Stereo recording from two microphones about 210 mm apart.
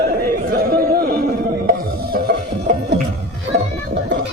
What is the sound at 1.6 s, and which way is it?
Music, 45° right (ahead or behind).